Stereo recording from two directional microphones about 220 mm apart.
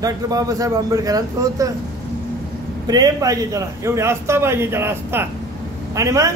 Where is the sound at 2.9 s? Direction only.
15° right (ahead or behind).